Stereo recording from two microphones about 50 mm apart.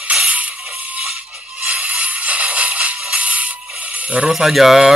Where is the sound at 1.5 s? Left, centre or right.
Right.